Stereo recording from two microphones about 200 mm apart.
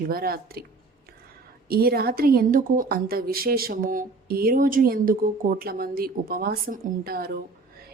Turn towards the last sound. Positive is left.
turn(degrees=-50)  # may be behind; listen again after turning